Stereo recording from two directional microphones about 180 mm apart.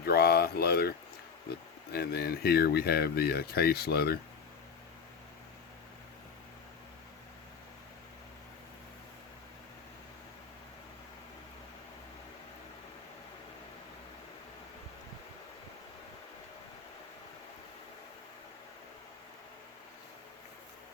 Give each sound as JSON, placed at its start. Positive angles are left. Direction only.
{"t": 0.0, "sound": "speech", "side_deg": 60}